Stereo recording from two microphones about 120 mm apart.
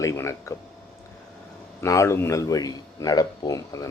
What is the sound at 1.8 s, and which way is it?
A man's voice, 25° left (ahead or behind).